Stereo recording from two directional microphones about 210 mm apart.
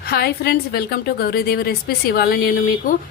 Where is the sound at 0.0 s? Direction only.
45° left (ahead or behind).